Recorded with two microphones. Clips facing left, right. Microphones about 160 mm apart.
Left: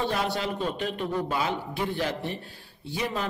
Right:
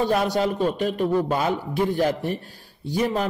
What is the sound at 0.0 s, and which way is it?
A man's voice, 45° right (ahead or behind).